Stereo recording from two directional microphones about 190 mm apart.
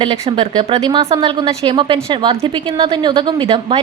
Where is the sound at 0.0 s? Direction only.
25° right (ahead or behind).